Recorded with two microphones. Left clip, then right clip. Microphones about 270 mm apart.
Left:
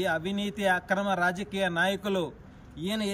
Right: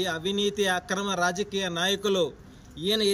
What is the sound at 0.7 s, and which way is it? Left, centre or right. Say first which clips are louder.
Speech: left 1 dB; centre.